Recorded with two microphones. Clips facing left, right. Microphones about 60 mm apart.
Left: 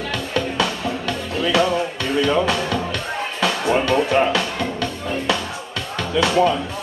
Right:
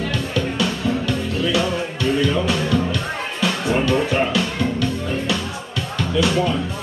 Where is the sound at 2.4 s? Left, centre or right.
Left.